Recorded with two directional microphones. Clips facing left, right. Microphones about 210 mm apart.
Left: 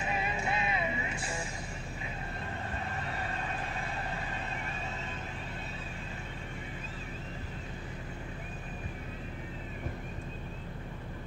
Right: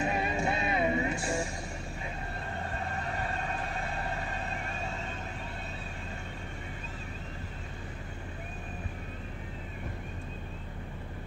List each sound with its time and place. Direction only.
0.0 s music: 45° right (ahead or behind)
2.8 s vehicle: 45° right (ahead or behind)